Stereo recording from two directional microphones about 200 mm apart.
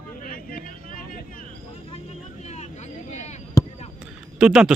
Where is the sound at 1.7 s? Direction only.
30° left (ahead or behind).